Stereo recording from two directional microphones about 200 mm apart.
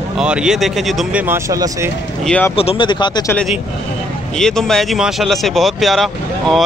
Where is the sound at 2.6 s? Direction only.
25° left (ahead or behind).